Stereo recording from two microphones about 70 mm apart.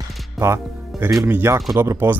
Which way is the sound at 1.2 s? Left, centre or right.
Right.